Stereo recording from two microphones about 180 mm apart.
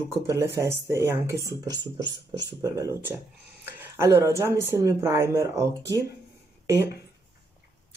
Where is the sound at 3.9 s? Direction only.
15° right (ahead or behind).